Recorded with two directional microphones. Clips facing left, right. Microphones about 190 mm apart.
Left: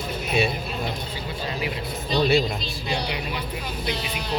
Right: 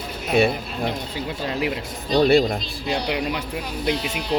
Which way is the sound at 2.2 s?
55° right (ahead or behind).